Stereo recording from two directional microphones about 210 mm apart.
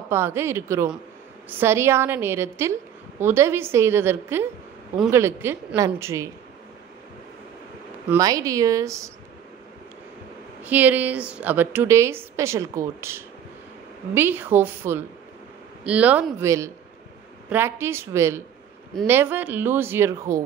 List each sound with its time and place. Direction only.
0.1 s a woman's voice: 10° right (ahead or behind)
8.1 s a woman's voice: 15° right (ahead or behind)
10.6 s a woman's voice: 10° right (ahead or behind)